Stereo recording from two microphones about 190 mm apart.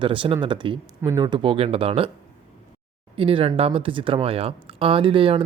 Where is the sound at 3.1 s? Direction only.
30° right (ahead or behind).